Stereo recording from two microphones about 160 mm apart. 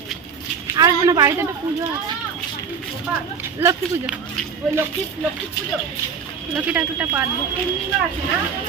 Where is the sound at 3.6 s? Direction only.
15° right (ahead or behind).